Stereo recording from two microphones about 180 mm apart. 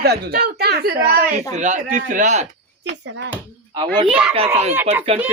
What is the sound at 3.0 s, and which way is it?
Speech, 85° right.